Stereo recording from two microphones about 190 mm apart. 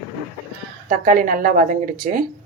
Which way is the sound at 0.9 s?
45° right (ahead or behind).